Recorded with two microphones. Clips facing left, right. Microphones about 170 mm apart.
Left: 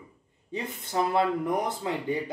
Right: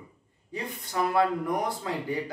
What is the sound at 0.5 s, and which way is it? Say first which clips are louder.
Speech: left 2 dB; 25° left (ahead or behind).